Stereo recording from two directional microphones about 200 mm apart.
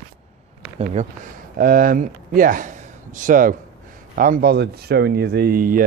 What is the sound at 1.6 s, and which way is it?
Speech, 45° right (ahead or behind).